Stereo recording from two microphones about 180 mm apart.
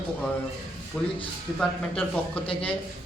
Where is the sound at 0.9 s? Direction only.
5° left (ahead or behind).